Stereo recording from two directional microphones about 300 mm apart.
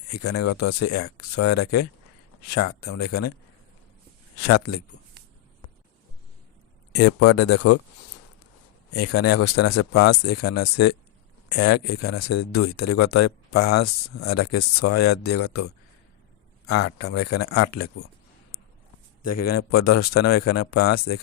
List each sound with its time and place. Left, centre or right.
0.1 s speech: left
4.4 s speech: left
6.9 s speech: left
8.9 s speech: left
16.6 s speech: left
19.2 s speech: left